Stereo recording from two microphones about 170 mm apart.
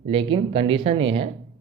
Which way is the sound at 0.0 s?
30° right (ahead or behind).